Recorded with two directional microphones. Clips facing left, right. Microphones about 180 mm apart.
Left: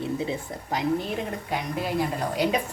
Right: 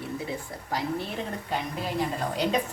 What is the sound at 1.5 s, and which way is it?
Speech, 10° left (ahead or behind).